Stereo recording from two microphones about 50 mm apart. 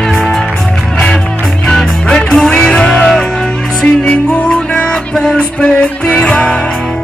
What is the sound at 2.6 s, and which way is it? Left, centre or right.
Music, centre.